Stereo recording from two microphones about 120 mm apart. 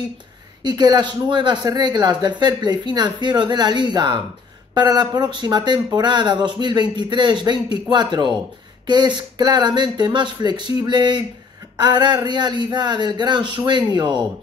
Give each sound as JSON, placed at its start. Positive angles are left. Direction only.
{"t": 0.7, "sound": "speech", "side_deg": -35}